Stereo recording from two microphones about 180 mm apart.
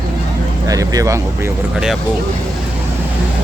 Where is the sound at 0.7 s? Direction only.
20° right (ahead or behind).